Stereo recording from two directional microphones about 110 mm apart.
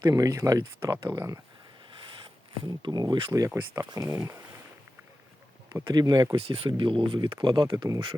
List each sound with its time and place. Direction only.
0.0 s speech: 35° right (ahead or behind)
2.2 s speech: 45° right (ahead or behind); by 4.4 s 25° right (ahead or behind)
5.9 s speech: 40° right (ahead or behind)
6.3 s speech: 55° right (ahead or behind)